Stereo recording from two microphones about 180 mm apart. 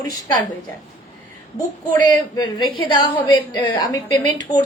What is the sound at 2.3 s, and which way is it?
A woman's voice, 20° left (ahead or behind).